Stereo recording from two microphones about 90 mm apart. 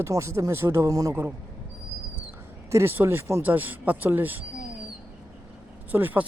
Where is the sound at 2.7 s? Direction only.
25° right (ahead or behind).